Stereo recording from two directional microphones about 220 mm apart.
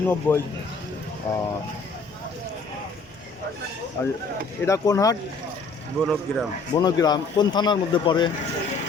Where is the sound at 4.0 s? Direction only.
10° left (ahead or behind).